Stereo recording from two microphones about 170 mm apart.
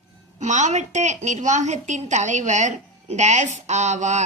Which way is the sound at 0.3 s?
45° right (ahead or behind).